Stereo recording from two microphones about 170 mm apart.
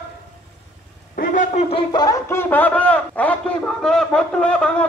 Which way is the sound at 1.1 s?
55° left (ahead or behind).